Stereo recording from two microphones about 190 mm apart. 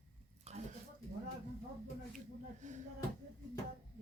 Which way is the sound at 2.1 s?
40° right (ahead or behind).